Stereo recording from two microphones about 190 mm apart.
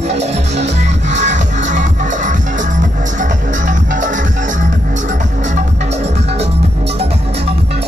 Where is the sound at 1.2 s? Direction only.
40° right (ahead or behind).